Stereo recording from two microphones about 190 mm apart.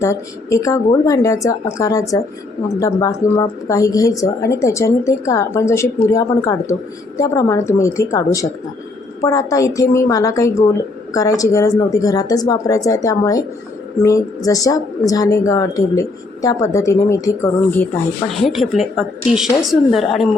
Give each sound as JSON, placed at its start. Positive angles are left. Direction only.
{"t": 0.0, "sound": "a woman's voice", "side_deg": 15}
{"t": 18.4, "sound": "a woman's voice", "side_deg": 0}